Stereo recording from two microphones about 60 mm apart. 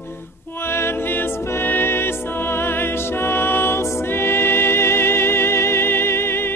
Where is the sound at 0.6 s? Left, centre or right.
Left.